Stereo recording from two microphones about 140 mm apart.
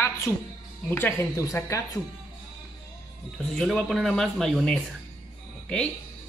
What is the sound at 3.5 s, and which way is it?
Speech, 5° left (ahead or behind).